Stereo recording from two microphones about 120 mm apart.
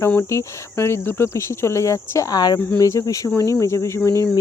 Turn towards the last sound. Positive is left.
turn(degrees=25)  # may be behind; listen again after turning